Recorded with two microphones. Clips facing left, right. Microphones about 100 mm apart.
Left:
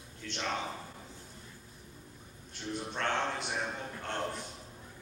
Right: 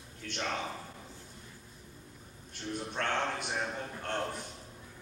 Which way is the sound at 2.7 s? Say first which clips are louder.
Even; 50° right (ahead or behind).